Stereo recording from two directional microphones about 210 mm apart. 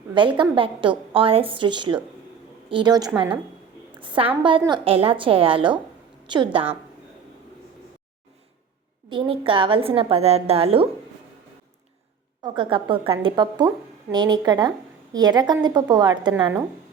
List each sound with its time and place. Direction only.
0.1 s a woman's voice: 25° right (ahead or behind)
9.0 s a woman's voice: 25° right (ahead or behind)
12.4 s a woman's voice: 25° right (ahead or behind)